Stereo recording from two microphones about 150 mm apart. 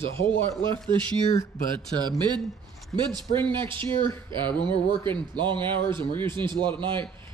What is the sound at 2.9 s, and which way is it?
Speech, 30° right (ahead or behind).